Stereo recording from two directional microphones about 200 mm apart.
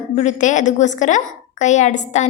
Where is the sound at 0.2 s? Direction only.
35° left (ahead or behind).